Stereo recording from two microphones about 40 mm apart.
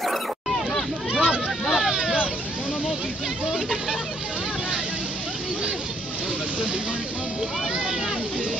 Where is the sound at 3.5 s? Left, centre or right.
Centre.